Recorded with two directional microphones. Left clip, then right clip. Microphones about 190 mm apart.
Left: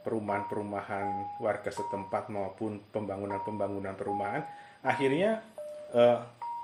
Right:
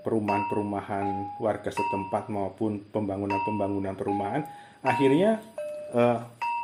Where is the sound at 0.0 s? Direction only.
25° right (ahead or behind).